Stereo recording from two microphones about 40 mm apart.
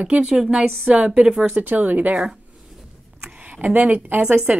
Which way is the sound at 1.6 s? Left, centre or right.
Right.